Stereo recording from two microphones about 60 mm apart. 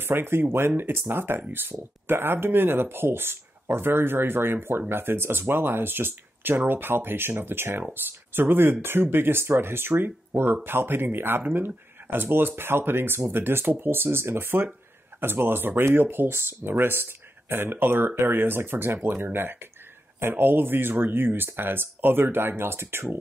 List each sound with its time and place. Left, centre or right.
0.0 s speech: right